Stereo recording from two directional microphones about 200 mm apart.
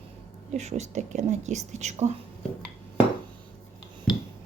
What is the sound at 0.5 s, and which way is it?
A woman's voice, 35° right (ahead or behind).